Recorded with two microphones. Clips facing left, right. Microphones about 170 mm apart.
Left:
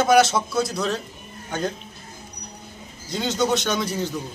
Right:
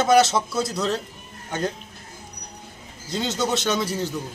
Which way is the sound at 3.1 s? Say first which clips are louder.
Left 2 dB; centre (ahead or behind).